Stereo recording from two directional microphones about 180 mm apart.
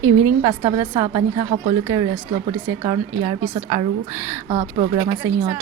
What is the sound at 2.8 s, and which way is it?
A woman's voice, 25° right (ahead or behind).